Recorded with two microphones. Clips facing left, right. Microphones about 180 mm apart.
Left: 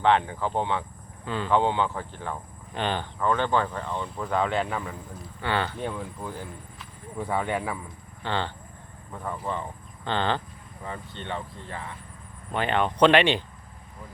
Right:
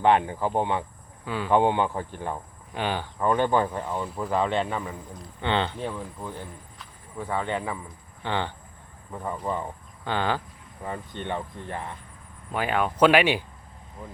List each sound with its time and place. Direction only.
0.0 s speech: 10° right (ahead or behind)
5.4 s speech: 20° right (ahead or behind)
5.8 s speech: 5° right (ahead or behind)
8.2 s speech: 15° right (ahead or behind)
12.5 s speech: 5° right (ahead or behind)